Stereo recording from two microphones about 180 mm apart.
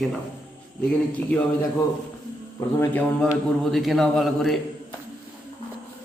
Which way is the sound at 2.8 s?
10° left (ahead or behind).